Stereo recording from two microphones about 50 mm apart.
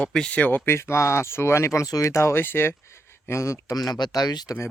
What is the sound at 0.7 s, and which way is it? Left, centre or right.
Speech, left.